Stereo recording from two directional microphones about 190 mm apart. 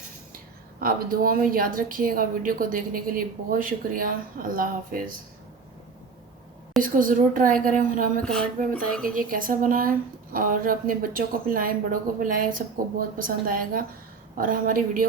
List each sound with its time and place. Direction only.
0.8 s speech: 50° right (ahead or behind)
6.8 s speech: 45° right (ahead or behind)
8.2 s speech: 5° left (ahead or behind)
9.1 s speech: 45° right (ahead or behind)